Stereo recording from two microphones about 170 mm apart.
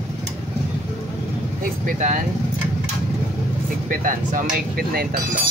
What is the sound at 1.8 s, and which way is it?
Speech, 50° right (ahead or behind).